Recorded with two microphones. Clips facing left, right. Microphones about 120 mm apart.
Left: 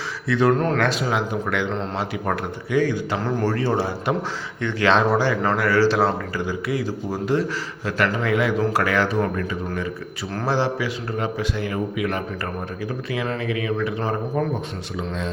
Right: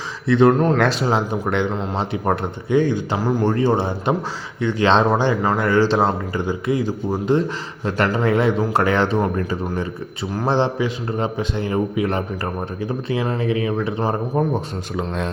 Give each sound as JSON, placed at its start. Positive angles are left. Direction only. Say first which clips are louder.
{"t": 0.3, "sound": "speech", "louder": "right 4 dB", "side_deg": -25}
{"t": 0.8, "sound": "speech", "louder": "right 3 dB", "side_deg": -35}
{"t": 3.2, "sound": "speech", "louder": "right 4 dB", "side_deg": -5}
{"t": 3.4, "sound": "speech", "louder": "right 4 dB", "side_deg": -20}